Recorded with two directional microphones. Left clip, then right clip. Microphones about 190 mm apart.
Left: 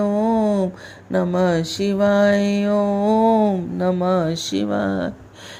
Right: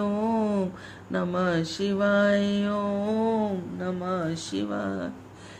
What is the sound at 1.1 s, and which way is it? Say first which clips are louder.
Mantra: left 8 dB; 30° left (ahead or behind).